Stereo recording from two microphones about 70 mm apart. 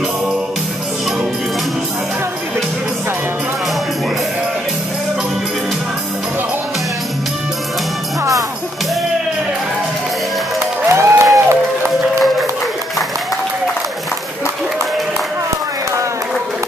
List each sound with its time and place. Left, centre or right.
8.2 s music: right
10.9 s music: right